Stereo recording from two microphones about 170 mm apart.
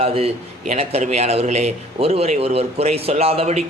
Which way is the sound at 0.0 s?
35° right (ahead or behind).